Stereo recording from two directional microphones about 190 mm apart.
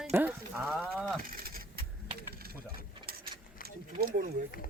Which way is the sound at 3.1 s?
55° right (ahead or behind).